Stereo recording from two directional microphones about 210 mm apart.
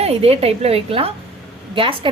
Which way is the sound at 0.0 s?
30° right (ahead or behind).